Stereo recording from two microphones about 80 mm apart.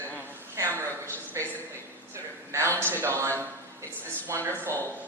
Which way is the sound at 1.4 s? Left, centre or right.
Right.